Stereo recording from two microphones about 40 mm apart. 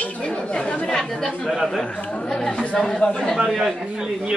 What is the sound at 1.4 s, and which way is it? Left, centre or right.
Speech, centre.